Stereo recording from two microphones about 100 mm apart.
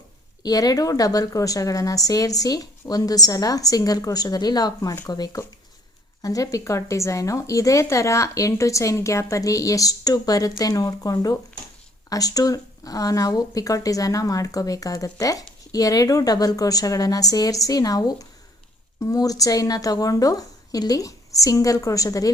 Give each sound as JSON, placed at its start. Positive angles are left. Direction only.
{"t": 0.4, "sound": "a woman's voice", "side_deg": 40}